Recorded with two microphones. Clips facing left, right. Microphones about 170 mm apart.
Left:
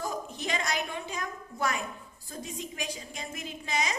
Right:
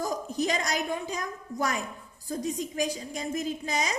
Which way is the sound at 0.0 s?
40° right (ahead or behind).